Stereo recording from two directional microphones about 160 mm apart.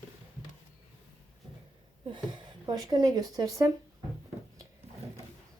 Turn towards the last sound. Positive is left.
turn(degrees=-20)  # may be behind; listen again after turning